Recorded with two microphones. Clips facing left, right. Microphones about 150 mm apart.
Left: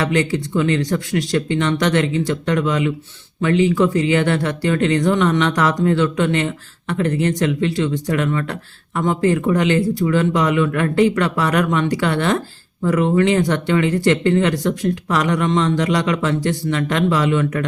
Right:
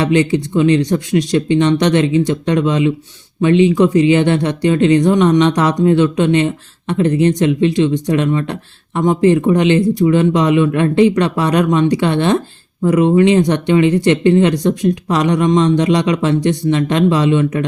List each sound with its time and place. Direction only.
0.0 s speech: 20° right (ahead or behind)